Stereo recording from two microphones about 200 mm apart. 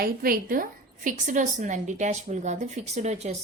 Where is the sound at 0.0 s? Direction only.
45° right (ahead or behind).